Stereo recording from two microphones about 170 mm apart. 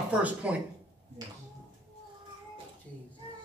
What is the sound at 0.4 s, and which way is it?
Speech, 10° right (ahead or behind).